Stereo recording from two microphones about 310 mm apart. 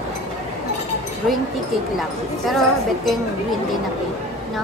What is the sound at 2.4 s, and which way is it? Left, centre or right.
Speech, centre.